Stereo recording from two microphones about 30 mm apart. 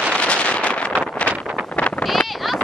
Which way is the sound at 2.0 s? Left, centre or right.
Centre.